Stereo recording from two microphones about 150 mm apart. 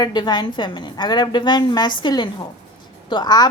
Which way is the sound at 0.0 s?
30° left (ahead or behind).